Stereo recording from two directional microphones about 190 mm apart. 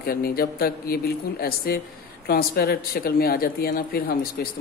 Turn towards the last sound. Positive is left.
turn(degrees=50)  # may be behind; listen again after turning